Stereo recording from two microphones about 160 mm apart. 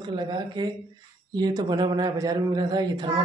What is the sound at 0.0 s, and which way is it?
Speech, 30° right (ahead or behind).